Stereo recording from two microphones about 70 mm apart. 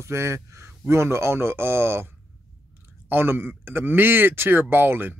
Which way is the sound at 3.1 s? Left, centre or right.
Right.